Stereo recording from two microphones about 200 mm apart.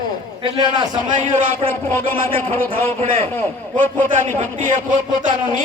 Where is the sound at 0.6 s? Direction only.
20° right (ahead or behind).